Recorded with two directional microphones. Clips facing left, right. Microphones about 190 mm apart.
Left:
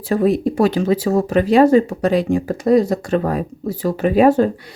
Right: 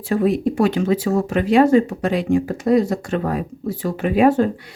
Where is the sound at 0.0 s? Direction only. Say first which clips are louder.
Left 2 dB; 40° left (ahead or behind).